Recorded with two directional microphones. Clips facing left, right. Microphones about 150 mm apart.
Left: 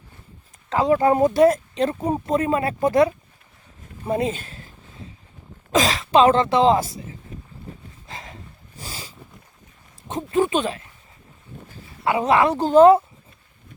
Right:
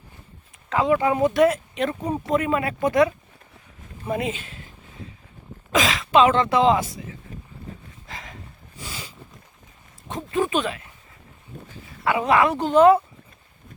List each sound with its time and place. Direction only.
0.7 s speech: 35° left (ahead or behind)
4.0 s a sound: 30° left (ahead or behind)
5.7 s speech: 35° left (ahead or behind)
8.0 s a sound: 30° left (ahead or behind)
8.8 s dog: 35° left (ahead or behind)
10.3 s speech: 30° left (ahead or behind)
12.0 s speech: 30° left (ahead or behind)